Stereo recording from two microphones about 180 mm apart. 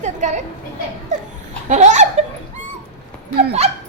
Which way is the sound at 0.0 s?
40° right (ahead or behind).